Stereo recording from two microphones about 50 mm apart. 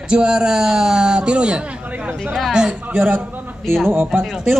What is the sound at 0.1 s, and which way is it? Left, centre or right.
A man's voice, centre.